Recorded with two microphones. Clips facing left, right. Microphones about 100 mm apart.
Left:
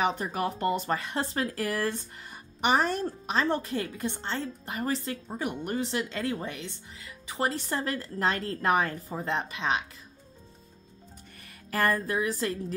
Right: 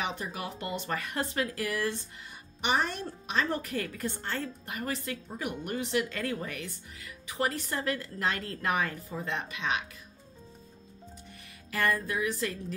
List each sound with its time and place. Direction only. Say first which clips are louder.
0.0 s speech: left 7 dB; 40° left (ahead or behind)
11.4 s speech: left 3 dB; 40° left (ahead or behind)